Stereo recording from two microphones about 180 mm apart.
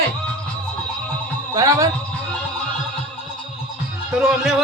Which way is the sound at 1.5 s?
20° right (ahead or behind).